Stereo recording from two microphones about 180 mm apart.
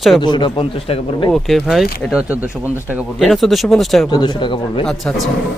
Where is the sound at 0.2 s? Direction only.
25° left (ahead or behind).